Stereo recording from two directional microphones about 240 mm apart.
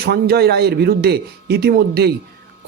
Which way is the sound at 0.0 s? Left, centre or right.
Right.